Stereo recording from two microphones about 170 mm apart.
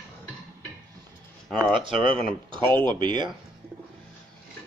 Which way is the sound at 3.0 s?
25° right (ahead or behind).